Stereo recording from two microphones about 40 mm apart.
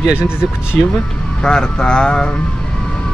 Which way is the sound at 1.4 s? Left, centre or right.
Centre.